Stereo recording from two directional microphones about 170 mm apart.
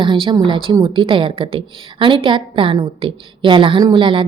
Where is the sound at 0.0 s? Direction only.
30° right (ahead or behind).